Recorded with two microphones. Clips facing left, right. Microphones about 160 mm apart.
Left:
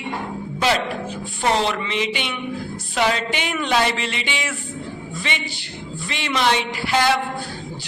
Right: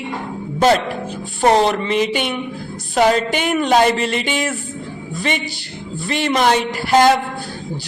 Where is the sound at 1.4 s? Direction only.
45° right (ahead or behind).